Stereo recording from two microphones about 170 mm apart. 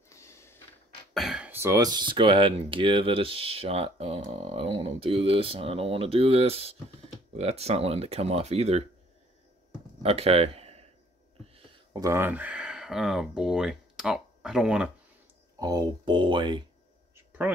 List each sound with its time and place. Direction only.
0.1 s a sound: 15° left (ahead or behind)
1.1 s throat clearing: centre (ahead or behind)
1.5 s speech: 15° right (ahead or behind); by 8.8 s 40° right (ahead or behind)
10.0 s speech: 35° right (ahead or behind)
11.9 s speech: 20° right (ahead or behind); by 14.9 s 5° right (ahead or behind)
15.6 s speech: 25° right (ahead or behind)